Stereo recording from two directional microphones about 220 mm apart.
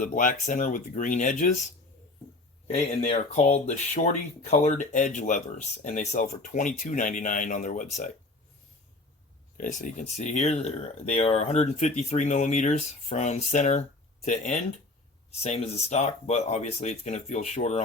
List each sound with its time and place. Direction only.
0.0 s speech: 40° left (ahead or behind)
2.7 s speech: 30° left (ahead or behind)
9.6 s speech: 35° left (ahead or behind)